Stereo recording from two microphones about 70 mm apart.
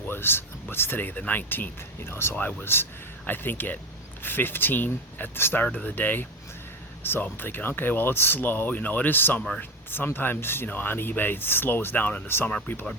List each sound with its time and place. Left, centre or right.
0.1 s speech: left
2.3 s speech: left
5.6 s speech: left